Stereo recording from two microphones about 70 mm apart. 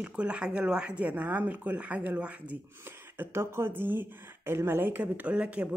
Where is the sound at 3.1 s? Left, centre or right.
Right; by 5.6 s centre.